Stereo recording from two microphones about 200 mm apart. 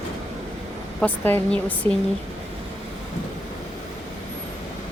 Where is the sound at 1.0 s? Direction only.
10° left (ahead or behind).